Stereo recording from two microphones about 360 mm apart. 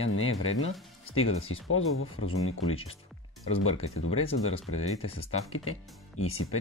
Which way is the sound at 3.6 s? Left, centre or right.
Left.